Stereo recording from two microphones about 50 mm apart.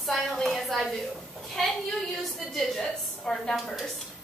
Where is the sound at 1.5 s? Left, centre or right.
Centre.